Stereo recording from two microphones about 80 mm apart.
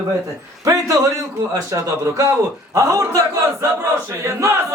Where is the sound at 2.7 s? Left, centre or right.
Right.